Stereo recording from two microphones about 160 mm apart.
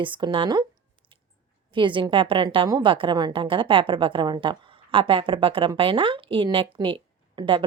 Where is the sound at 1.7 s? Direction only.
30° right (ahead or behind).